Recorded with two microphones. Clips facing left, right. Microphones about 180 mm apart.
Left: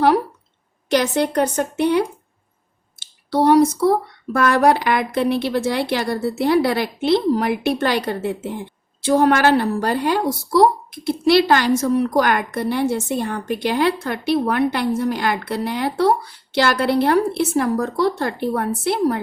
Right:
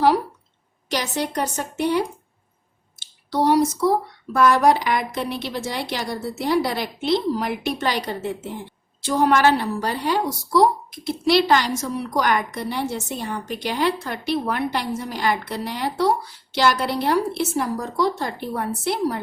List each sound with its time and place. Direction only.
0.9 s a woman's voice: 60° left (ahead or behind)
3.2 s a woman's voice: 60° left (ahead or behind)